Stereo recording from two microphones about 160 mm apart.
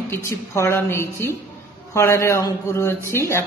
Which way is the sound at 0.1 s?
20° left (ahead or behind).